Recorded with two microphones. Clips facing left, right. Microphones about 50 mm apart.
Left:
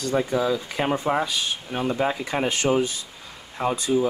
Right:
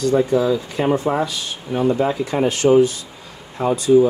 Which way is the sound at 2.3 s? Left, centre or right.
Left.